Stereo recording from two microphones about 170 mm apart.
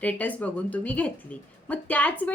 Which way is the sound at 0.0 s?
10° left (ahead or behind).